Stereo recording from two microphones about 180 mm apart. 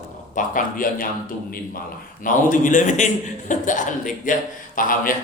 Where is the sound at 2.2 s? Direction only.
45° left (ahead or behind).